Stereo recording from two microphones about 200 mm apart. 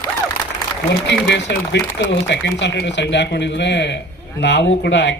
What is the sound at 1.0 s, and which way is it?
Speech, 60° left (ahead or behind).